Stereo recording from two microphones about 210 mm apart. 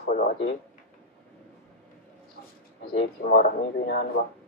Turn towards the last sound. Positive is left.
turn(degrees=45)  # may be behind; listen again after turning